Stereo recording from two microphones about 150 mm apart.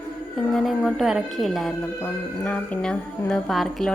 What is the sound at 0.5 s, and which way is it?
A woman's voice, centre (ahead or behind).